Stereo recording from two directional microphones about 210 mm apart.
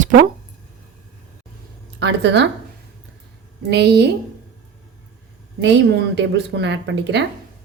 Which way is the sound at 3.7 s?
50° right (ahead or behind).